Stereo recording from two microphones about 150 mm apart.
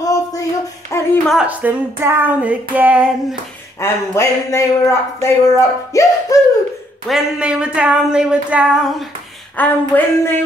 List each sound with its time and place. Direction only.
0.0 s a sound: 25° left (ahead or behind)
1.2 s female singing: 5° right (ahead or behind)
3.8 s speech: 20° left (ahead or behind)
5.9 s music: 20° left (ahead or behind)
7.1 s female singing: 5° right (ahead or behind)
9.6 s speech: 10° left (ahead or behind)